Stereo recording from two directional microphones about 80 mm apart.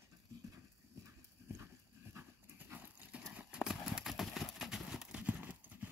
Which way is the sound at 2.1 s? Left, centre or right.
Right.